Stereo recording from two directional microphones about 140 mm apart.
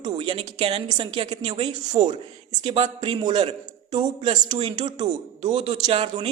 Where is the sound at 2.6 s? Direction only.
40° right (ahead or behind).